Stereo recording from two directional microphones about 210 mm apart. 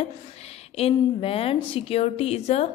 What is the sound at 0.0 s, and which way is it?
A woman's voice, 30° left (ahead or behind).